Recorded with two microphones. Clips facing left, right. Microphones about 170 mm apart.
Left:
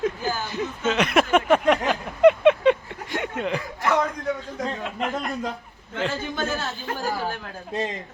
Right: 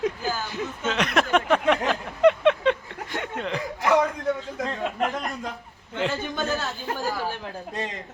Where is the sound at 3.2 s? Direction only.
10° left (ahead or behind).